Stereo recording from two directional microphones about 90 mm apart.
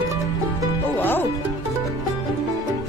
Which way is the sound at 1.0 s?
20° left (ahead or behind).